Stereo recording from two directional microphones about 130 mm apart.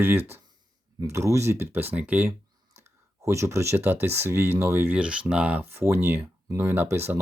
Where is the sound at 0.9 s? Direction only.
20° right (ahead or behind).